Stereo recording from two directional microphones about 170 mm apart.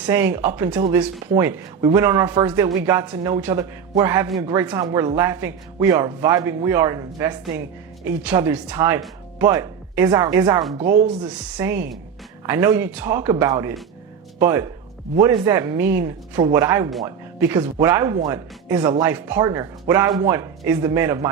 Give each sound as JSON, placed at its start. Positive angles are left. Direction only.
{"t": 0.1, "sound": "a man's voice", "side_deg": -15}
{"t": 11.6, "sound": "a man's voice", "side_deg": -15}